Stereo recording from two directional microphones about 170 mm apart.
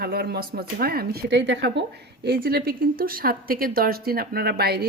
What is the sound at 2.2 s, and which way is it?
Speech, 65° right (ahead or behind).